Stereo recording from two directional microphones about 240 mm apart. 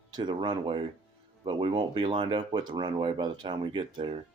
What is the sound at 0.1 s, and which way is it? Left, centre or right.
Speech, centre.